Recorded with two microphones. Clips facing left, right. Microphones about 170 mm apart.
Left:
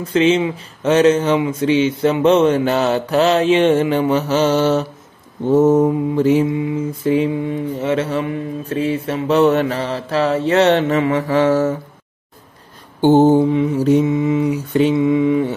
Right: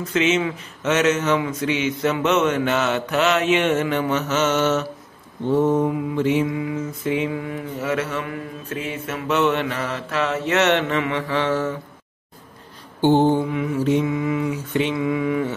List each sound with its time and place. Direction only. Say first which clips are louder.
0.0 s mantra: left 5 dB; 30° left (ahead or behind)
6.4 s mantra: left 5 dB; 25° left (ahead or behind); by 11.8 s 40° left (ahead or behind)
13.0 s mantra: left 5 dB; 45° left (ahead or behind)
13.4 s mantra: left 7 dB; 30° left (ahead or behind)
14.0 s mantra: left 6 dB; 25° left (ahead or behind)
14.7 s mantra: left 8 dB; 35° left (ahead or behind)
15.0 s mantra: left 7 dB; 25° left (ahead or behind)